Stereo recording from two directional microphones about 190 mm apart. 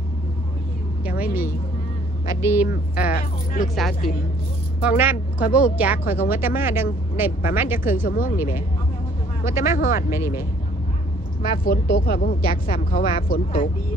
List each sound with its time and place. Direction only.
1.2 s speech: 10° right (ahead or behind)
3.1 s a woman's voice: 50° left (ahead or behind)
3.6 s speech: centre (ahead or behind)
4.8 s speech: 10° right (ahead or behind)
8.1 s a woman's voice: 50° left (ahead or behind)
9.5 s speech: 15° right (ahead or behind)
9.8 s a woman's voice: 50° left (ahead or behind)
10.0 s speech: 15° right (ahead or behind)
11.4 s a woman's voice: 50° left (ahead or behind)